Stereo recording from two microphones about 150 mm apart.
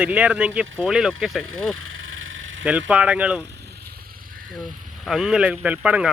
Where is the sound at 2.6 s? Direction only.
10° right (ahead or behind).